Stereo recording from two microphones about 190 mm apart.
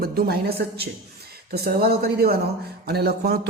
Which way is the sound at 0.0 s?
55° right (ahead or behind).